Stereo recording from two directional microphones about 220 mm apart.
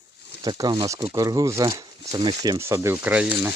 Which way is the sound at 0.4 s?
20° right (ahead or behind).